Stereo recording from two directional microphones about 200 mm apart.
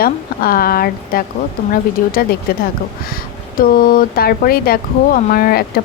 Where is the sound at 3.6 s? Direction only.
45° left (ahead or behind).